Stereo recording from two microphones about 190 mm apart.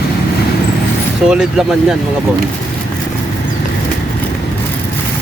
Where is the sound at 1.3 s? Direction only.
5° right (ahead or behind).